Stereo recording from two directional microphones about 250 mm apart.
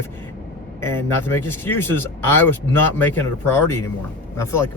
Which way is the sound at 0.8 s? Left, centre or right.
Centre.